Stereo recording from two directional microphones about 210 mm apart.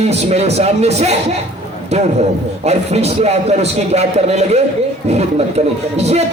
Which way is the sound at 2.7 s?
30° right (ahead or behind).